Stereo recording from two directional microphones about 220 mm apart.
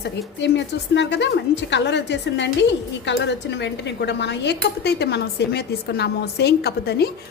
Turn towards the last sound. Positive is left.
turn(degrees=45)  # may be behind; listen again after turning